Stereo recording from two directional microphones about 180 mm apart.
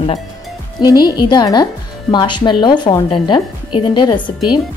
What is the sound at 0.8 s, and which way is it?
Speech, 20° left (ahead or behind).